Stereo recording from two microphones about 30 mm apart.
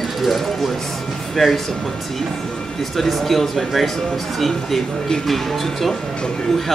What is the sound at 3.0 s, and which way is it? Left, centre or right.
Speech, centre.